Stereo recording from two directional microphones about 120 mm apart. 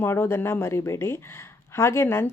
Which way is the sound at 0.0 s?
20° left (ahead or behind).